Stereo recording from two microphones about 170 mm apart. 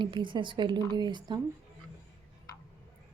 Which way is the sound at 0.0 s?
30° right (ahead or behind).